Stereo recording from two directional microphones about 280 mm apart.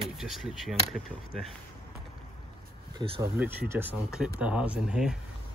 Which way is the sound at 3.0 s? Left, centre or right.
Centre.